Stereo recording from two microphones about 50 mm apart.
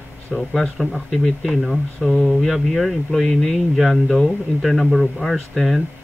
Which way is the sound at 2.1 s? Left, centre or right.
Left.